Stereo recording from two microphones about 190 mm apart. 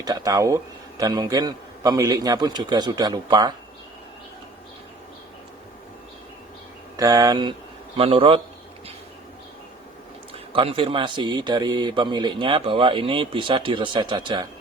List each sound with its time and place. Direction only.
0.0 s a man's voice: 20° right (ahead or behind)
6.9 s a man's voice: 20° right (ahead or behind)
10.5 s a man's voice: 30° right (ahead or behind)